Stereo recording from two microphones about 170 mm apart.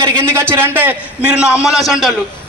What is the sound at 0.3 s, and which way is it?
A man's voice, 15° right (ahead or behind).